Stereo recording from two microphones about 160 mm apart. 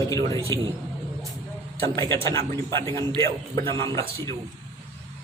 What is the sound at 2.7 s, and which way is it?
A man's voice, 15° left (ahead or behind).